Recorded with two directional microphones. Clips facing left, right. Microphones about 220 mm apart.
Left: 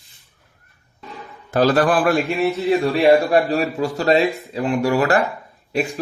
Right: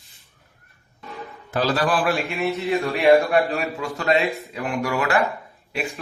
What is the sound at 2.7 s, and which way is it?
Speech, 35° left (ahead or behind).